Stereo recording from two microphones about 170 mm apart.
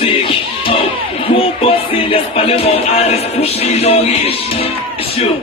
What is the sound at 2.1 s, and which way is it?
Music, 35° left (ahead or behind).